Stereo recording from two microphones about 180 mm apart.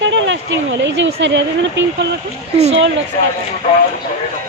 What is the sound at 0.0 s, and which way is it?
Speech, 90° right.